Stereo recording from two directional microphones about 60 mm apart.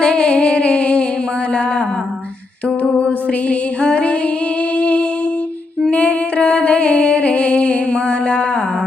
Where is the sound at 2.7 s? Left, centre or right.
Left.